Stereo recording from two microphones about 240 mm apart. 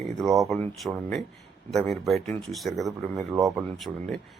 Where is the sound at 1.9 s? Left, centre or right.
Centre.